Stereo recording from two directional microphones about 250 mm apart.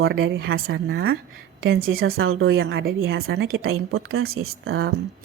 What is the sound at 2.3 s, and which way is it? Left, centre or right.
Speech, right.